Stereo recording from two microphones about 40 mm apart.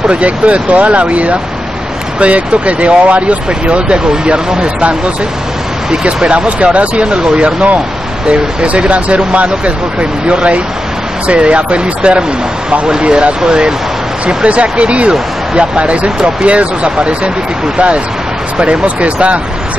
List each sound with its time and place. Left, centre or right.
0.1 s speech: right
5.9 s speech: right
14.2 s speech: right